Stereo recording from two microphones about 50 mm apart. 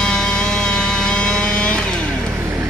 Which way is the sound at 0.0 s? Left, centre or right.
Centre.